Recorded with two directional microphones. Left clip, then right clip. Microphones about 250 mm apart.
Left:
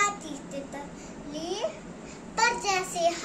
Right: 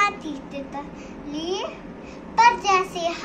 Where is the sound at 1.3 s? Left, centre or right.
Centre.